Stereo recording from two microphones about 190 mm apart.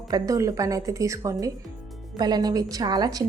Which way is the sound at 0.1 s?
20° right (ahead or behind).